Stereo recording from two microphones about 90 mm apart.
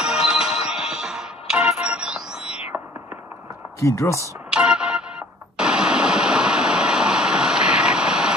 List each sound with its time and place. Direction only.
0.0 s music: 10° right (ahead or behind)
3.8 s speech: 35° left (ahead or behind)
4.5 s music: 10° right (ahead or behind)
5.6 s a sound: 10° right (ahead or behind)